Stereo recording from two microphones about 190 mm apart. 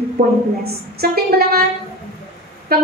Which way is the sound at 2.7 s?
55° right (ahead or behind).